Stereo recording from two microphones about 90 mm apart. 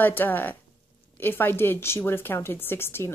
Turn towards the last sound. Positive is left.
turn(degrees=25)  # may be behind; listen again after turning